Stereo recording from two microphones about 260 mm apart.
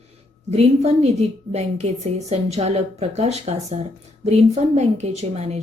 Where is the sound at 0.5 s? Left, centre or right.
Right.